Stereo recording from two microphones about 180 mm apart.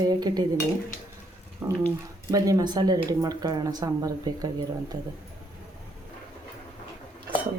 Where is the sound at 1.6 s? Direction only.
15° right (ahead or behind).